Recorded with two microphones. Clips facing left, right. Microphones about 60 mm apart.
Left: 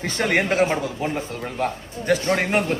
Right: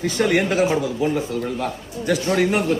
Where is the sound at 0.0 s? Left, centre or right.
Left.